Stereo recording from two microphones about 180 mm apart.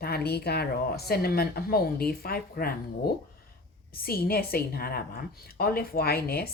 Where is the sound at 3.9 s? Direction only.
55° left (ahead or behind).